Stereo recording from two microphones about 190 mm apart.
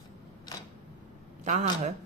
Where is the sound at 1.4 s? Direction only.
40° right (ahead or behind).